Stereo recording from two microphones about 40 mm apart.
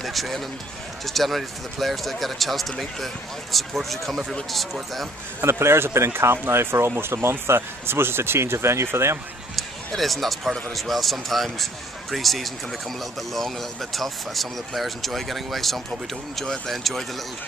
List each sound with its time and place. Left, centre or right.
0.0 s speech: centre
5.4 s speech: right
9.6 s speech: centre